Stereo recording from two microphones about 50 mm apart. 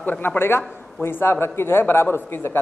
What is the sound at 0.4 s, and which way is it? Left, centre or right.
A man's voice, left.